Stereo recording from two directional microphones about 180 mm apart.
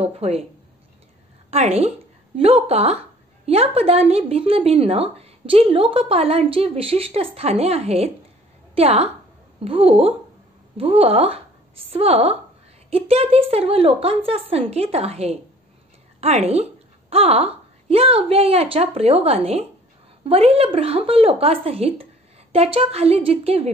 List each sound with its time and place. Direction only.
0.0 s speech: 35° right (ahead or behind)
1.5 s a woman's voice: 35° right (ahead or behind)